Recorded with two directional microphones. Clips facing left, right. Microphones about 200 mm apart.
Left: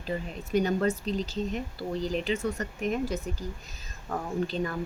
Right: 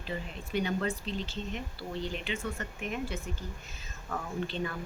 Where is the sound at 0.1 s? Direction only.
40° left (ahead or behind).